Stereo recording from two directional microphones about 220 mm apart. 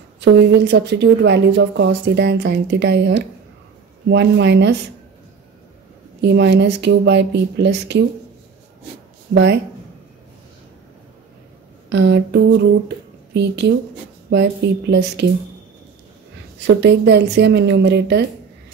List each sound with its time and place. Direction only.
0.2 s a woman's voice: 50° right (ahead or behind)
6.2 s a woman's voice: 50° right (ahead or behind)
9.3 s a woman's voice: 50° right (ahead or behind)
11.9 s a woman's voice: 50° right (ahead or behind)
16.6 s a woman's voice: 50° right (ahead or behind)